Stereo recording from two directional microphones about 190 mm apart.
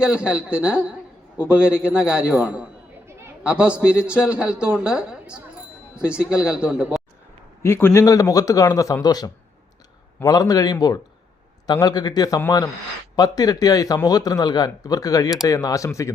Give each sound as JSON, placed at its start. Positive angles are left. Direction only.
{"t": 0.0, "sound": "a man's voice", "side_deg": -5}
{"t": 3.1, "sound": "chatter", "side_deg": -10}
{"t": 3.8, "sound": "a man's voice", "side_deg": -5}
{"t": 7.6, "sound": "a man's voice", "side_deg": 10}